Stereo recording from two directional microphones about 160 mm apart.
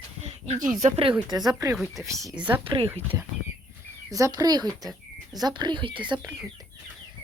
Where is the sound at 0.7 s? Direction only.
45° right (ahead or behind).